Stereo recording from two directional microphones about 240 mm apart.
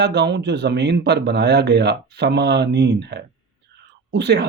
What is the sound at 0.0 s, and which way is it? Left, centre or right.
Speech, right.